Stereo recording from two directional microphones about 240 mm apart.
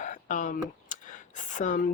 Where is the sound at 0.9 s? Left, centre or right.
Left.